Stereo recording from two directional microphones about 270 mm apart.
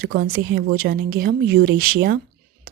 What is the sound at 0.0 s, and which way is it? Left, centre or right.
Speech, right.